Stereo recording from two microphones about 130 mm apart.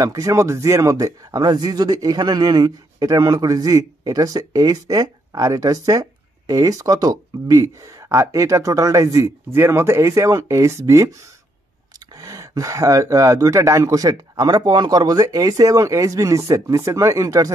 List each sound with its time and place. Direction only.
0.0 s speech: 25° right (ahead or behind)
12.2 s speech: 25° right (ahead or behind)